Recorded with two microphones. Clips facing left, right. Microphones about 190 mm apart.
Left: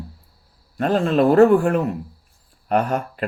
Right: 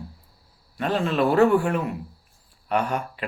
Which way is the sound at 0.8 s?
45° left (ahead or behind).